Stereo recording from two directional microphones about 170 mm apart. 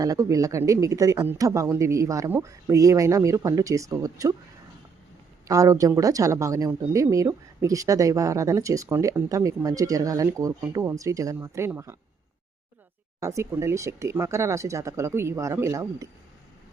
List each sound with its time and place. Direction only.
0.0 s speech: 20° right (ahead or behind)
5.5 s speech: 20° right (ahead or behind)
13.1 s speech: 15° right (ahead or behind)